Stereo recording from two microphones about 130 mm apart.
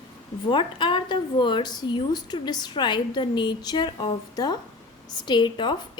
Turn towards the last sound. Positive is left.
turn(degrees=35)  # may be behind; listen again after turning